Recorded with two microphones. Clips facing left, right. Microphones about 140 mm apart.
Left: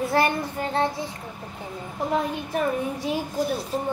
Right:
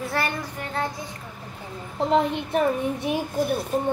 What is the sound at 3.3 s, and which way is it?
Speech, 55° right (ahead or behind).